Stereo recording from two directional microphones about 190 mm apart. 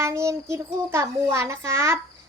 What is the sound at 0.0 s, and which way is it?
A child's voice, 15° right (ahead or behind).